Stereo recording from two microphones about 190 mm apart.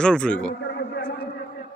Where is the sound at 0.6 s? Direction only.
60° left (ahead or behind).